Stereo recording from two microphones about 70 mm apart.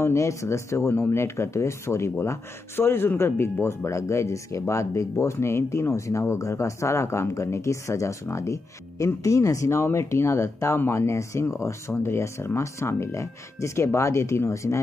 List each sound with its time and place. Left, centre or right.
0.0 s speech: left